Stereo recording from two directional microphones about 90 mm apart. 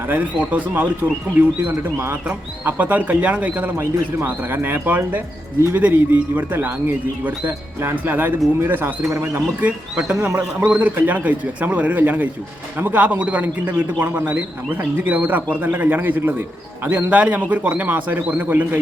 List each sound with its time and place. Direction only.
0.1 s speech: 15° right (ahead or behind)
9.6 s speech: 15° right (ahead or behind)